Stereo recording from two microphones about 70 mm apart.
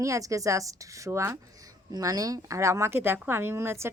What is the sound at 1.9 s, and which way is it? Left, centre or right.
A woman's voice, right.